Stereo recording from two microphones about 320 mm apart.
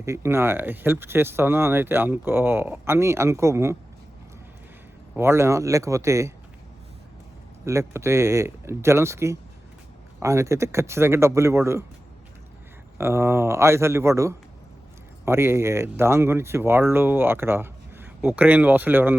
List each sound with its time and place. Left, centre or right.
0.0 s speech: centre
5.1 s speech: centre
7.6 s speech: centre
13.0 s speech: centre